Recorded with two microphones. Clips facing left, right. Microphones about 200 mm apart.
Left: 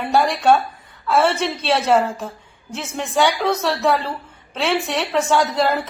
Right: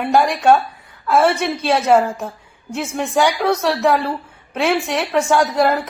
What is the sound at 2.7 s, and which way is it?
A woman's voice, 10° right (ahead or behind).